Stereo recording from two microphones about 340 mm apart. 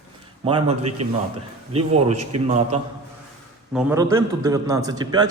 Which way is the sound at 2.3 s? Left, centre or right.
Right.